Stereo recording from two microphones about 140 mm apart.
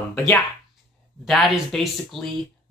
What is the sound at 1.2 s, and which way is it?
Speech, centre (ahead or behind).